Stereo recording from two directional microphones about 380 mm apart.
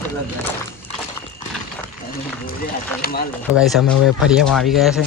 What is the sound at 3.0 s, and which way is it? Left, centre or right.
Speech, left.